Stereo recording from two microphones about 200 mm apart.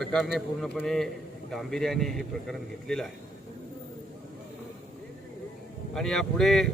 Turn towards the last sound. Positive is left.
turn(degrees=0)  # may be behind; listen again after turning